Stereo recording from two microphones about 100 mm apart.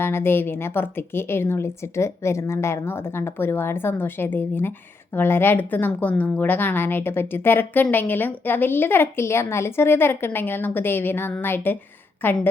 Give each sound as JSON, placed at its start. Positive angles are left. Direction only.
{"t": 0.0, "sound": "a woman's voice", "side_deg": 25}